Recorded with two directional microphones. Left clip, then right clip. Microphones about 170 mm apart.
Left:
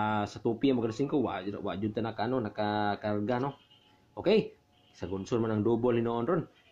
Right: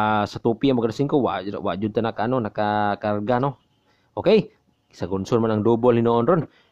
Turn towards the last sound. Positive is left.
turn(degrees=-45)  # may be behind; listen again after turning